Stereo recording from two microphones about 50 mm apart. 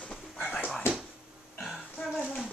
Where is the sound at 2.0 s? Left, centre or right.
Centre.